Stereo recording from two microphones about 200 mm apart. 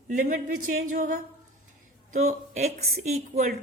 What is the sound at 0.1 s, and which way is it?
A woman's voice, 40° right (ahead or behind).